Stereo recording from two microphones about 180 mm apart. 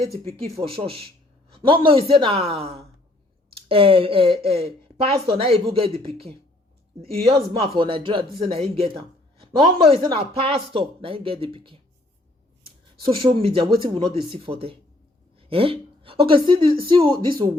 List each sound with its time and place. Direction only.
0.0 s speech: 35° right (ahead or behind)
13.1 s speech: 30° right (ahead or behind)